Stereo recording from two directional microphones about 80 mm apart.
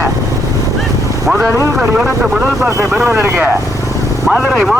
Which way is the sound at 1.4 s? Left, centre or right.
Right.